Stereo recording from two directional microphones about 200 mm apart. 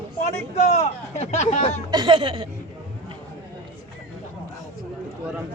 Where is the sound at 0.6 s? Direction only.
35° left (ahead or behind).